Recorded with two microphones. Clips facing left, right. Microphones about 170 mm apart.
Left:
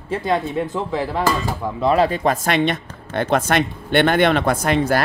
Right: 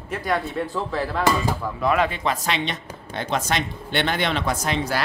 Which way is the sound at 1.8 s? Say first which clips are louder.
Left 5 dB; 35° left (ahead or behind).